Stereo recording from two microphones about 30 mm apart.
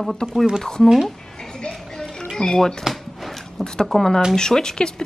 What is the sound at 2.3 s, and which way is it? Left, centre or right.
A woman's voice, centre.